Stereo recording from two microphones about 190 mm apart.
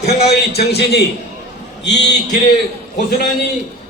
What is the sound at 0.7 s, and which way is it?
A man's voice, 60° left (ahead or behind).